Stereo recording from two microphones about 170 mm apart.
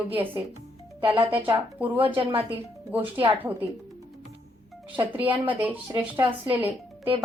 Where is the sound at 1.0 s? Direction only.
30° right (ahead or behind).